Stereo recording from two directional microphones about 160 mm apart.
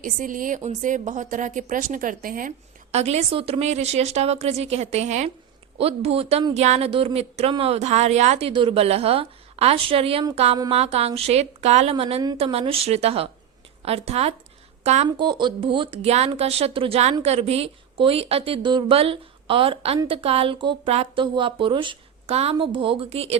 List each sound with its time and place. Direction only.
0.0 s a woman's voice: 55° right (ahead or behind)
2.9 s a woman's voice: 40° right (ahead or behind)
15.0 s a woman's voice: 30° right (ahead or behind)